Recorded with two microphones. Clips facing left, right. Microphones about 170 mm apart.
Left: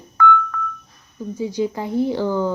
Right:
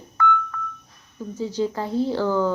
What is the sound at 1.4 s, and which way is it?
A woman's voice, 15° left (ahead or behind).